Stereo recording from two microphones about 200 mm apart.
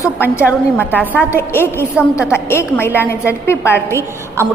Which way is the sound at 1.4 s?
10° left (ahead or behind).